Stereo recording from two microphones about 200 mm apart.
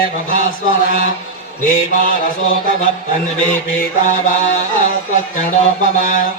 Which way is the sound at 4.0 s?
40° left (ahead or behind).